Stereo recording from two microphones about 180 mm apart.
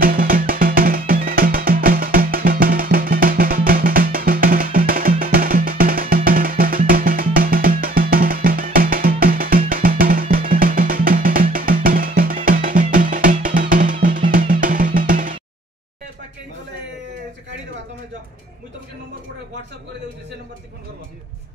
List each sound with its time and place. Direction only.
0.0 s music: 50° right (ahead or behind)